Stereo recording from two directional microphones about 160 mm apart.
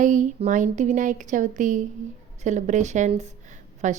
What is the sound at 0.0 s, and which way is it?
A woman's voice, 50° right (ahead or behind).